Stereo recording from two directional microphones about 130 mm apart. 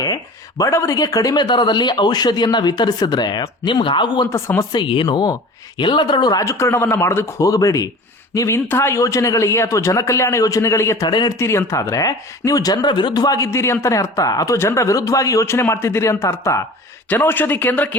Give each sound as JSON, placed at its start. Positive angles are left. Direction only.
{"t": 0.6, "sound": "speech", "side_deg": 25}
{"t": 4.3, "sound": "speech", "side_deg": 20}
{"t": 4.7, "sound": "speech", "side_deg": 40}
{"t": 11.0, "sound": "speech", "side_deg": 35}
{"t": 11.3, "sound": "speech", "side_deg": 20}